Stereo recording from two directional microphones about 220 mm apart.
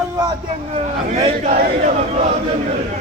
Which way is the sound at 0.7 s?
30° right (ahead or behind).